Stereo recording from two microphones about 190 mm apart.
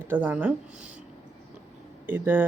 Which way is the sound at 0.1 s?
10° right (ahead or behind).